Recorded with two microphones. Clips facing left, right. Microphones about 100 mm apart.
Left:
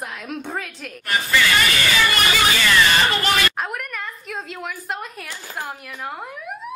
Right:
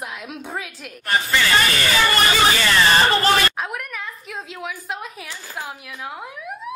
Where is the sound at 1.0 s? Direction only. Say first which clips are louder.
Even; 30° right (ahead or behind).